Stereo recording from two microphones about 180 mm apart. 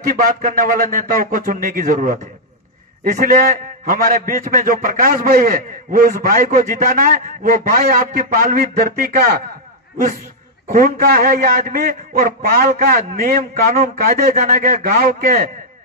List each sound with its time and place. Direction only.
0.1 s a man's voice: 50° right (ahead or behind)
10.7 s a man's voice: 55° right (ahead or behind)